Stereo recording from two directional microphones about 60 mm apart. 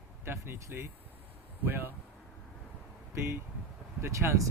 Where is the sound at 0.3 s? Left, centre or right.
Right.